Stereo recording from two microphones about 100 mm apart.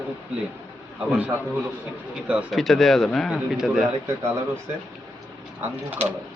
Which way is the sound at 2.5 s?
Centre (ahead or behind).